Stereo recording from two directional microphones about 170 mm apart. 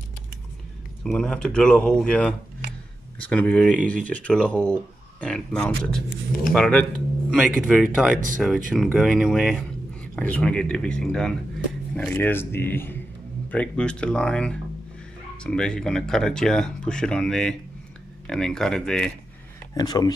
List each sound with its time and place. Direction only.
1.0 s speech: 5° left (ahead or behind)
19.7 s speech: 20° left (ahead or behind)